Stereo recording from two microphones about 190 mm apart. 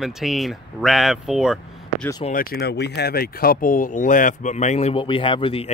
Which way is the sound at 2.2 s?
50° left (ahead or behind).